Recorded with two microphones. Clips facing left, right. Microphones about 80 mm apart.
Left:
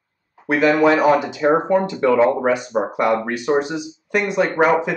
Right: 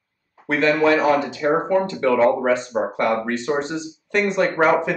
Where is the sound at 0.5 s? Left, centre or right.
Centre.